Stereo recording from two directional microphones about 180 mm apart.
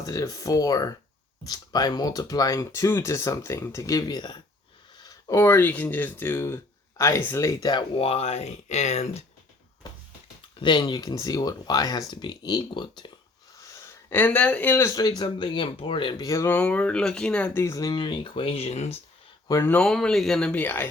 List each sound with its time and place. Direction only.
0.0 s speech: 20° left (ahead or behind); by 9.2 s 40° left (ahead or behind)
9.8 s a sound: 20° left (ahead or behind)
10.6 s speech: 25° left (ahead or behind)
13.6 s speech: 15° left (ahead or behind); by 18.9 s 35° left (ahead or behind)
19.5 s speech: 20° left (ahead or behind)
19.7 s speech: 5° left (ahead or behind)